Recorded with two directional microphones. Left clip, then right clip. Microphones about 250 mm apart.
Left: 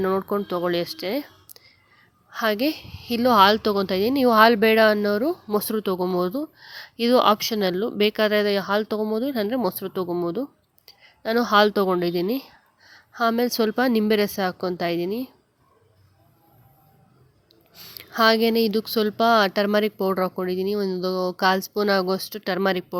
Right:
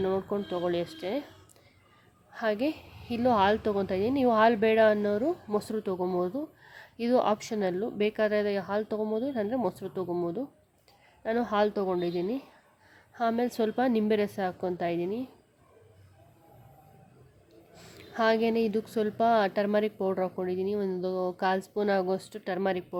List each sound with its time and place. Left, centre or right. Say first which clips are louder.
0.2 s a woman's voice: left 6 dB; centre
2.3 s a woman's voice: left 6 dB; centre
17.7 s a woman's voice: left 8 dB; centre